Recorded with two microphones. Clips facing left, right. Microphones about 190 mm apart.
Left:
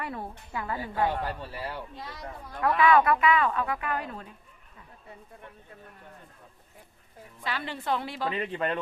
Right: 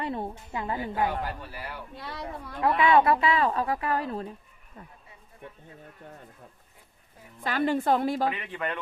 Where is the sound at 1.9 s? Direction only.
65° right (ahead or behind).